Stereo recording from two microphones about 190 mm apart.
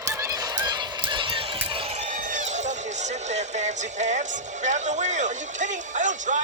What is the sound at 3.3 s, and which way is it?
Music, 40° right (ahead or behind).